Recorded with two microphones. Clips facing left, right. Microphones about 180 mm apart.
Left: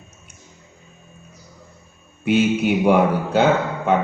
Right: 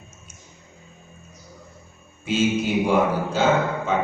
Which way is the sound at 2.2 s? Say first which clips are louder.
Left 4 dB; 60° left (ahead or behind).